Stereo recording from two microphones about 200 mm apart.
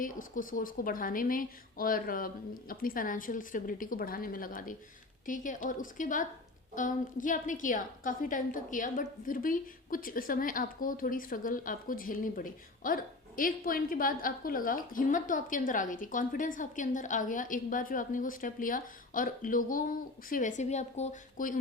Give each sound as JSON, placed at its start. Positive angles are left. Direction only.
{"t": 0.0, "sound": "a woman's voice", "side_deg": 45}